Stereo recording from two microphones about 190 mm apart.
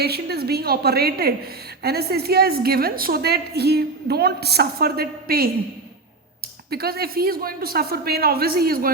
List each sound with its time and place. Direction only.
0.0 s a woman's voice: 55° right (ahead or behind)
6.7 s speech: 55° right (ahead or behind)